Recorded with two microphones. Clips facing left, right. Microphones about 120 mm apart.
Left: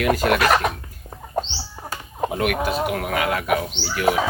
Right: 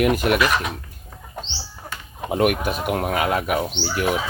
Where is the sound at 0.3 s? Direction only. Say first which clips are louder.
Left 2 dB; 65° left (ahead or behind).